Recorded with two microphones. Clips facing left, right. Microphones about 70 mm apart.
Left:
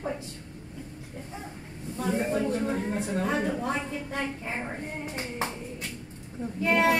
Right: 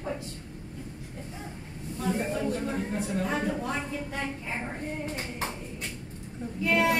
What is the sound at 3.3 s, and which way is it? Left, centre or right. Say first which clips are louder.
Speech: left 2 dB; left.